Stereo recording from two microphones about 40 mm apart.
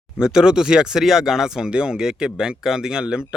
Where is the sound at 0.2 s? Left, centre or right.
Centre.